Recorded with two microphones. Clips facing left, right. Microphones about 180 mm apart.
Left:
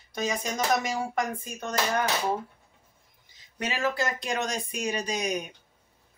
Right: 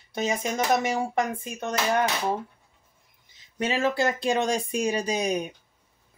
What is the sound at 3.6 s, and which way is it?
Speech, 25° right (ahead or behind).